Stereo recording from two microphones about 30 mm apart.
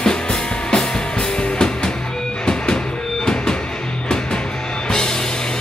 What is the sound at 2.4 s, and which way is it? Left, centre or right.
Music, left.